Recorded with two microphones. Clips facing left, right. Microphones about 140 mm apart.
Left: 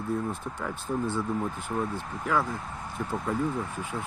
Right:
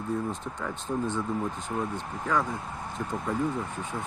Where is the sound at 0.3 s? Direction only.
5° left (ahead or behind).